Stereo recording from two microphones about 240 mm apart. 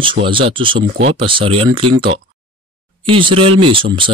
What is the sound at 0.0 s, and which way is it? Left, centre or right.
Speech, right.